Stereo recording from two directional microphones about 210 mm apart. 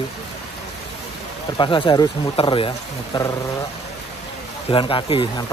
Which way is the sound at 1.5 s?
25° left (ahead or behind).